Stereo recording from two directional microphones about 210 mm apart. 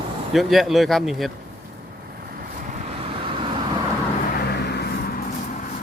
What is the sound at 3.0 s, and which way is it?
Vehicle, 25° right (ahead or behind).